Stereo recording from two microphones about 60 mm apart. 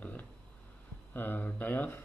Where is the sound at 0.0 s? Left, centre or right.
Left.